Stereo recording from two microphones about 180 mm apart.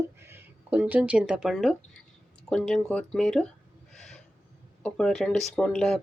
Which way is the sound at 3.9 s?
Centre (ahead or behind).